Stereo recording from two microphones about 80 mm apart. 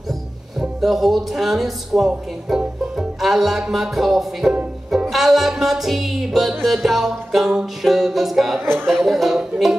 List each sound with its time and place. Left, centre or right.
0.6 s speech: centre
4.9 s music: centre
8.5 s speech: right
8.8 s music: centre